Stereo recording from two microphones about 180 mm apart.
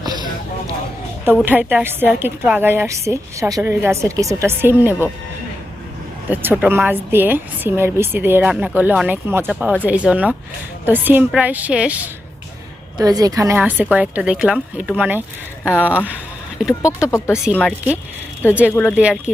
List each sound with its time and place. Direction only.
0.0 s a sound: 25° right (ahead or behind)
1.2 s a woman's voice: 10° right (ahead or behind)
6.3 s a woman's voice: 10° right (ahead or behind)
13.0 s a woman's voice: 20° right (ahead or behind)
16.8 s speech: 15° left (ahead or behind)
17.3 s speech: 5° right (ahead or behind)
17.6 s speech: 10° left (ahead or behind)
18.9 s a woman's voice: 5° right (ahead or behind)